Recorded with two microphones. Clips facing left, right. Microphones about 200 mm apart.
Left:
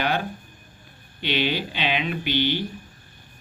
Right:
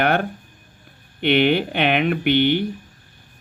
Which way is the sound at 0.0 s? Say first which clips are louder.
Right 6 dB; 60° right (ahead or behind).